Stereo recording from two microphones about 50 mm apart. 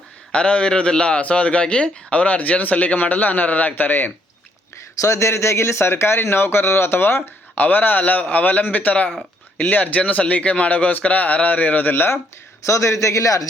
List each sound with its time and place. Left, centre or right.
0.3 s speech: left
4.9 s speech: left
5.9 s speech: left
7.5 s a man's voice: left
12.6 s a man's voice: left